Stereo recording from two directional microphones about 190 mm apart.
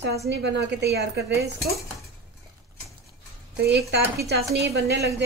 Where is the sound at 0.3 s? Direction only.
65° right (ahead or behind).